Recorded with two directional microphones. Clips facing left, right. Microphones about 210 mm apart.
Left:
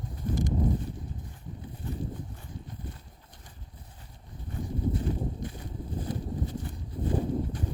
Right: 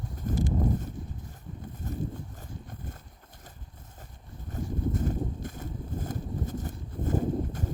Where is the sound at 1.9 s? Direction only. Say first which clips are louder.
Even; 40° right (ahead or behind).